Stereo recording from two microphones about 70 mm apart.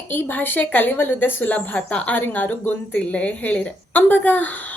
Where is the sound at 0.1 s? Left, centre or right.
Left.